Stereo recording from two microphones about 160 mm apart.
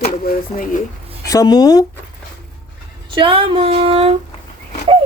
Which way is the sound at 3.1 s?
30° right (ahead or behind).